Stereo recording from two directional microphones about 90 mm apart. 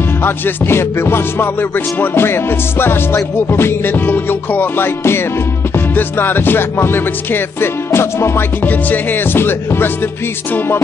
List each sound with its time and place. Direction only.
0.2 s music: 25° left (ahead or behind)